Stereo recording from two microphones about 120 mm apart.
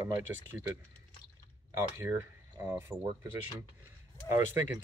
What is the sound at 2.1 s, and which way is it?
Speech, 15° right (ahead or behind).